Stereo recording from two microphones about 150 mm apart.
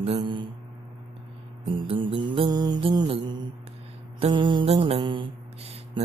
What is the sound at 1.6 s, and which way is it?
Music, 40° right (ahead or behind).